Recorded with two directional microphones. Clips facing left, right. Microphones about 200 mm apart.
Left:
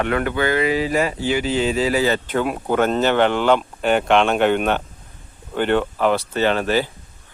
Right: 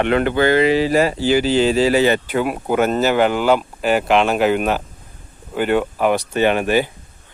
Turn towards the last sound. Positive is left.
turn(degrees=-15)  # may be behind; listen again after turning